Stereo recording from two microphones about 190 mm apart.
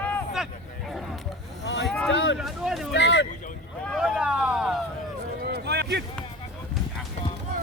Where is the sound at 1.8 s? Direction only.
5° left (ahead or behind).